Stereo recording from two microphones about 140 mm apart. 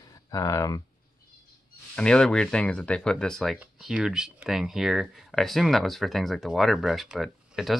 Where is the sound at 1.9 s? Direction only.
5° left (ahead or behind).